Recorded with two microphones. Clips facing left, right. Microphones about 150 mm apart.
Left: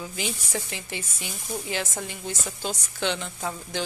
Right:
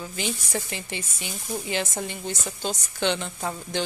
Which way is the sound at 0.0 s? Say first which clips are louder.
Right 1 dB; 5° left (ahead or behind).